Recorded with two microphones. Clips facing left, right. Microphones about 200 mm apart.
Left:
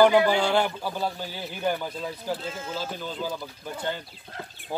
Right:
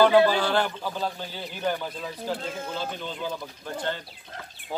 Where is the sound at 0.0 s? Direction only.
15° left (ahead or behind).